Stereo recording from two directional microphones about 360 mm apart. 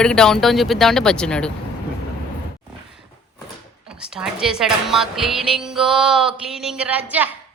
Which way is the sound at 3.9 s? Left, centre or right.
Centre.